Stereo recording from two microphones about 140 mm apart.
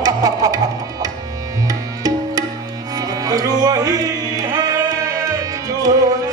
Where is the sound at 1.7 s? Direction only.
25° right (ahead or behind).